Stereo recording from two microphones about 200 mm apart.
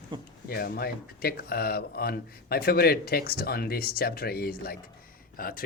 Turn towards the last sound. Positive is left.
turn(degrees=45)  # may be behind; listen again after turning